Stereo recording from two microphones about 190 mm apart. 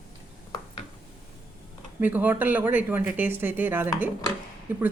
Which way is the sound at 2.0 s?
10° right (ahead or behind).